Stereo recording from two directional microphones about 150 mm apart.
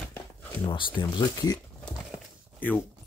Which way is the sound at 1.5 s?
5° left (ahead or behind).